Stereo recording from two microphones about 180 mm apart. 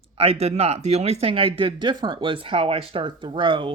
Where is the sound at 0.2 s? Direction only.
35° right (ahead or behind).